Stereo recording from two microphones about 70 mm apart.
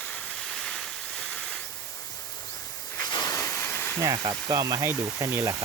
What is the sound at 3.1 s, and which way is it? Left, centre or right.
Hiss, left.